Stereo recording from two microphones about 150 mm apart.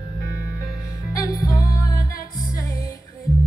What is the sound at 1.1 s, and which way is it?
Music, 20° left (ahead or behind).